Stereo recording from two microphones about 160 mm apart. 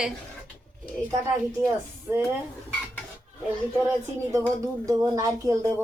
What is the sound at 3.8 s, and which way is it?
Speech, 20° right (ahead or behind).